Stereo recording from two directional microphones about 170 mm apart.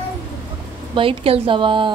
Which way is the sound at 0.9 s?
30° right (ahead or behind).